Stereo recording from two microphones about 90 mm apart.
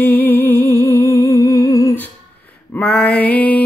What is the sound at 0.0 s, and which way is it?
Music, 25° left (ahead or behind).